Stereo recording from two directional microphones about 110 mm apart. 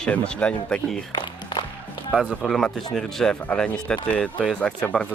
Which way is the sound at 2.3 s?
5° left (ahead or behind).